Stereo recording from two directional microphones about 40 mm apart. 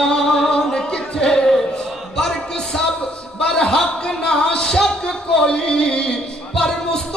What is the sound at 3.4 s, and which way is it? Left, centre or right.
Speech, left.